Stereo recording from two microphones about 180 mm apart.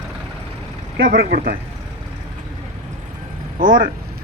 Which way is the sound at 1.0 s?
55° right (ahead or behind).